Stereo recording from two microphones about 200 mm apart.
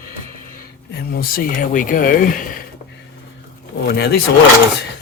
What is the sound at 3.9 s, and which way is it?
Speech, 55° left (ahead or behind).